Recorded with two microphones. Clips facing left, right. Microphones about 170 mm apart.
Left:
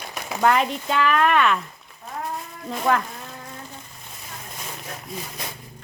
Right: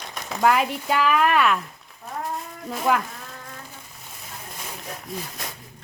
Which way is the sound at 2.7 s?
5° right (ahead or behind).